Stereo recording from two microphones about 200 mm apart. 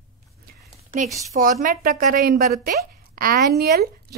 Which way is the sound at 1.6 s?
45° right (ahead or behind).